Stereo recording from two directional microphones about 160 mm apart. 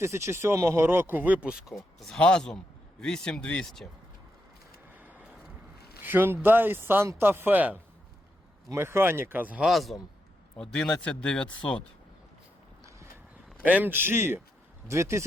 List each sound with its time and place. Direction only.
0.0 s speech: 15° right (ahead or behind); by 3.8 s 5° left (ahead or behind)
6.0 s speech: 10° right (ahead or behind); by 11.8 s 5° left (ahead or behind)
12.8 s a sound: 20° right (ahead or behind)
13.6 s speech: 10° right (ahead or behind)